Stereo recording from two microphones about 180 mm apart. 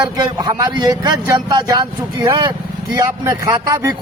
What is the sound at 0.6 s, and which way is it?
A man's voice, 20° right (ahead or behind).